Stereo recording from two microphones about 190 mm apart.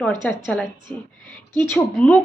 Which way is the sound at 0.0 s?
5° left (ahead or behind).